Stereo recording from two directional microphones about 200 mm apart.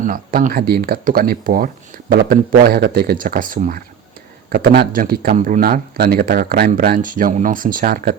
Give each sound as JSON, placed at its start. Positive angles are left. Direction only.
{"t": 0.0, "sound": "speech", "side_deg": -45}